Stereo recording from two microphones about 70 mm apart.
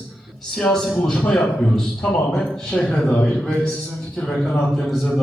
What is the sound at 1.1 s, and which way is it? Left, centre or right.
A man's voice, centre.